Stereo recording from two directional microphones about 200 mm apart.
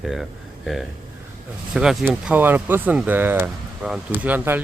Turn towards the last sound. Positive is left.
turn(degrees=-10)  # may be behind; listen again after turning